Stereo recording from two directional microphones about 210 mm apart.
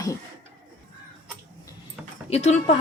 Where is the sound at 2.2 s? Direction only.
30° left (ahead or behind).